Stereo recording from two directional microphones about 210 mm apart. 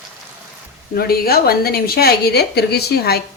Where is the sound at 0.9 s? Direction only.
45° left (ahead or behind).